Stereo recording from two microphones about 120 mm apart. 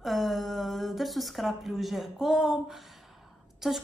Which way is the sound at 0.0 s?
Centre (ahead or behind).